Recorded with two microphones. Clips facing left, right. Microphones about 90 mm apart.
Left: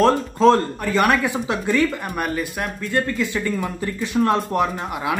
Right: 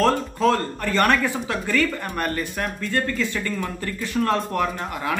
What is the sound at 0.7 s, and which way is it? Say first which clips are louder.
Speech: left 1 dB; 10° left (ahead or behind).